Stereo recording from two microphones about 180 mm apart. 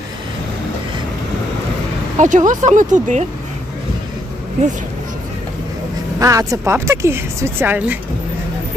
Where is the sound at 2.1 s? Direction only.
45° right (ahead or behind).